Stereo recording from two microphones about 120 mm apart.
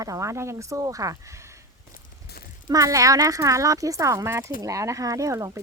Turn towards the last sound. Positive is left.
turn(degrees=-25)  # may be behind; listen again after turning